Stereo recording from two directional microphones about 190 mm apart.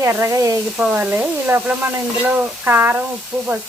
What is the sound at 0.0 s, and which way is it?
Speech, 15° right (ahead or behind).